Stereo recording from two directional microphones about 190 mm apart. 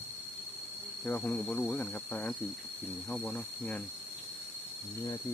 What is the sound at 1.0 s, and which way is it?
Speech, 10° left (ahead or behind).